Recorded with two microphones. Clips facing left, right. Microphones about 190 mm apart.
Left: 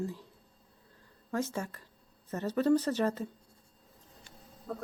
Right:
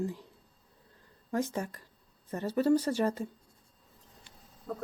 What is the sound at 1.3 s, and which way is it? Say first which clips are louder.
Speech: right 2 dB; 15° right (ahead or behind).